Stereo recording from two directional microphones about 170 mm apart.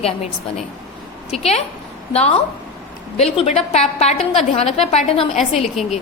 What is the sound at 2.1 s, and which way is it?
A woman's voice, 40° left (ahead or behind).